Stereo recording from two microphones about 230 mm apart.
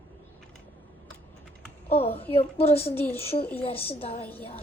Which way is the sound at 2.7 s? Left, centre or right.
Centre.